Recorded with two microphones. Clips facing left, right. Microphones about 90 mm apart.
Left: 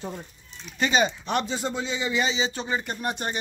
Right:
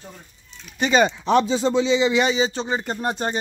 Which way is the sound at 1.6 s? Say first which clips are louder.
Right 10 dB; 90° right.